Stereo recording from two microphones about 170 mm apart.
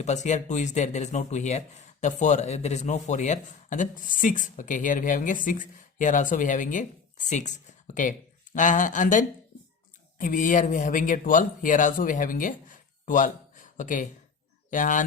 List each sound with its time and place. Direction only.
0.0 s speech: 45° left (ahead or behind)